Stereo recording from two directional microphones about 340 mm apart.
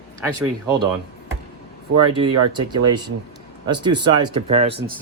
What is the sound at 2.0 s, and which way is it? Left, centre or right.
Speech, centre.